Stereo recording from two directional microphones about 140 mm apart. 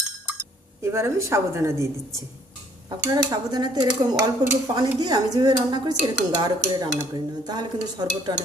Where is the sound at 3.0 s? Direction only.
25° right (ahead or behind).